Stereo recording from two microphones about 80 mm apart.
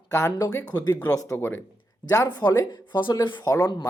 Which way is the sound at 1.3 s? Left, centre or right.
Left.